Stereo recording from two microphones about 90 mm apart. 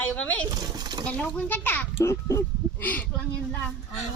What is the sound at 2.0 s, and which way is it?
Speech, 35° left (ahead or behind).